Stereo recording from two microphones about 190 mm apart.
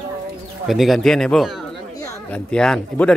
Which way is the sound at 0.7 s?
Centre (ahead or behind).